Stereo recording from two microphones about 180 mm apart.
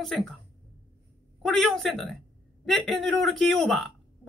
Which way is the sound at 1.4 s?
Centre (ahead or behind).